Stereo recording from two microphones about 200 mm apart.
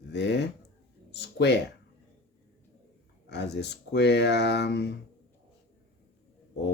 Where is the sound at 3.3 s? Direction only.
55° left (ahead or behind).